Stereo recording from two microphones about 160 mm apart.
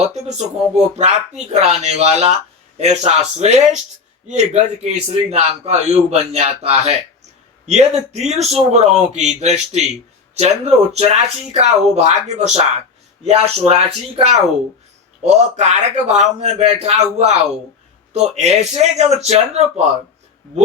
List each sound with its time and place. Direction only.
0.1 s a man's voice: 45° right (ahead or behind)